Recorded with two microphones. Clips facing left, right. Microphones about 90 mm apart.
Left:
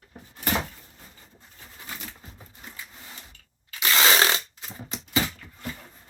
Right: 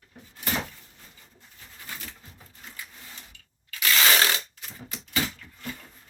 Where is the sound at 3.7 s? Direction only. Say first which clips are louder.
Left 2 dB; 25° left (ahead or behind).